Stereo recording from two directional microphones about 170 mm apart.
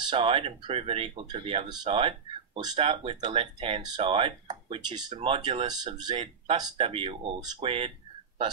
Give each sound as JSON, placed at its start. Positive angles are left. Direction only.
{"t": 0.1, "sound": "speech", "side_deg": -35}